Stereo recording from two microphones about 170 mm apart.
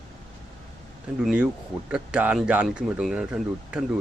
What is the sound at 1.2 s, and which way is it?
Speech, 5° right (ahead or behind).